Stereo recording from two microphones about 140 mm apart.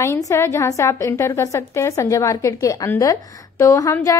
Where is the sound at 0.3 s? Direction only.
20° left (ahead or behind).